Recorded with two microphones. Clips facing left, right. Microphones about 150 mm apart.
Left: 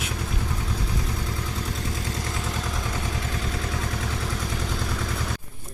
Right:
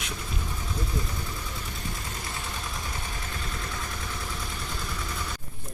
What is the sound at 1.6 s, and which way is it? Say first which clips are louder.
Vehicle: left 6 dB; 90° left.